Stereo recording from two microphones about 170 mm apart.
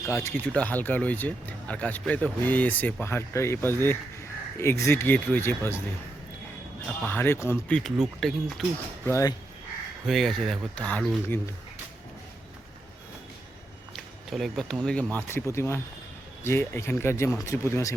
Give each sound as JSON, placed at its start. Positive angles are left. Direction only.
{"t": 0.1, "sound": "speech", "side_deg": 15}
{"t": 7.0, "sound": "speech", "side_deg": 10}
{"t": 7.8, "sound": "speech", "side_deg": 0}
{"t": 9.0, "sound": "speech", "side_deg": 15}
{"t": 10.1, "sound": "speech", "side_deg": 0}
{"t": 13.9, "sound": "a sound", "side_deg": 0}
{"t": 14.8, "sound": "speech", "side_deg": 5}